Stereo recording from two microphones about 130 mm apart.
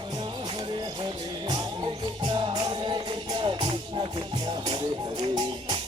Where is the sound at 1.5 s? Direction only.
35° right (ahead or behind).